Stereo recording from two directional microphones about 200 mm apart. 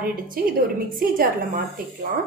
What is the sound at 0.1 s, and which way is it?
A woman's voice, 45° right (ahead or behind).